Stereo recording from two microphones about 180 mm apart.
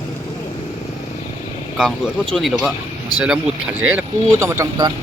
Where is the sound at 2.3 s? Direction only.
Centre (ahead or behind).